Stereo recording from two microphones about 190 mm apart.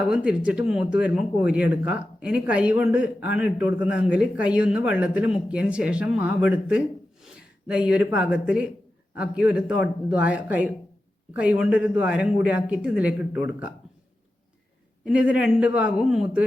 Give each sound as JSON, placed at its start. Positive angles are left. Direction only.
{"t": 0.0, "sound": "speech", "side_deg": -5}
{"t": 15.0, "sound": "speech", "side_deg": -5}